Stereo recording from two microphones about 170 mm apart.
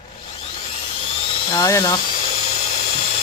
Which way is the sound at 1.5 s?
20° left (ahead or behind).